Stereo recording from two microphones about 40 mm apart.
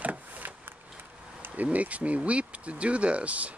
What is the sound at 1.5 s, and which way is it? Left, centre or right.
Speech, right.